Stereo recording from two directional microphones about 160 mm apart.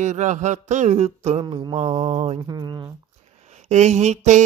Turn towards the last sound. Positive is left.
turn(degrees=-50)  # may be behind; listen again after turning